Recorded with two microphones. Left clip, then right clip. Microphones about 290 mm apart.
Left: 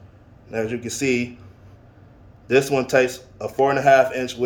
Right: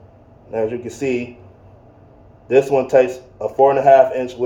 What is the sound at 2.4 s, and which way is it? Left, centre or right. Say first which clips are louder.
Speech: right 4 dB; left.